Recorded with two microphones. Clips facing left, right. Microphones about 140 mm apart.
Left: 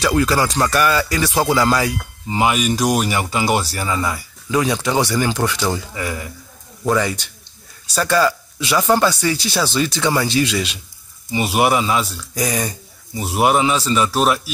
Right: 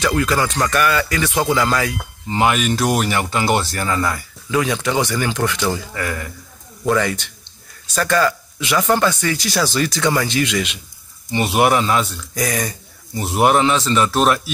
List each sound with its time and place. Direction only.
0.1 s speech: 15° left (ahead or behind)
9.3 s speech: 25° left (ahead or behind)
9.9 s speech: 10° left (ahead or behind)
10.2 s speech: 30° left (ahead or behind)
11.2 s speech: 10° left (ahead or behind)